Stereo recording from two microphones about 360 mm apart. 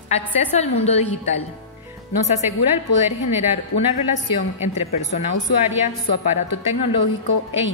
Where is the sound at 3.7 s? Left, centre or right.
Left.